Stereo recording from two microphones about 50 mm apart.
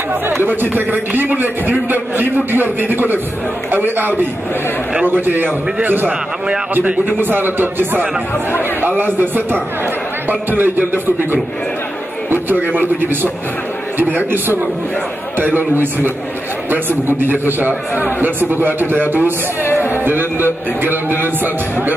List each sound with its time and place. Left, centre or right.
0.5 s a man's voice: right
12.3 s a man's voice: right
19.6 s music: left
19.9 s a man's voice: right